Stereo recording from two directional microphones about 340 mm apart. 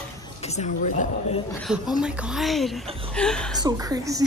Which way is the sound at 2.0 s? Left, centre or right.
Centre.